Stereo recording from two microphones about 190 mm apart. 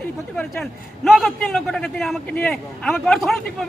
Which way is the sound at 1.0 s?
Centre (ahead or behind).